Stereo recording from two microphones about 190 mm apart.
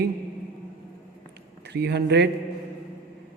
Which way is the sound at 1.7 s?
60° right (ahead or behind).